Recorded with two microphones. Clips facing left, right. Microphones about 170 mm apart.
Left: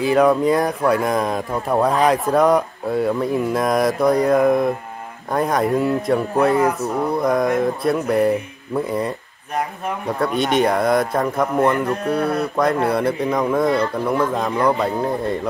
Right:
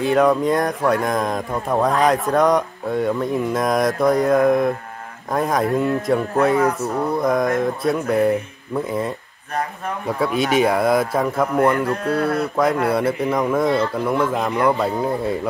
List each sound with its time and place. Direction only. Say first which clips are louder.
0.0 s speech: left 1 dB; centre (ahead or behind)
11.8 s livestock: even; 20° left (ahead or behind)
12.8 s speech: even; centre (ahead or behind)